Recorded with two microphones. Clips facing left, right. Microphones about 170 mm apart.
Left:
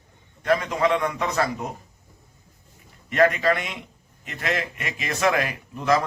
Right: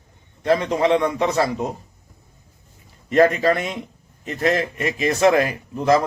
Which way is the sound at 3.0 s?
35° right (ahead or behind).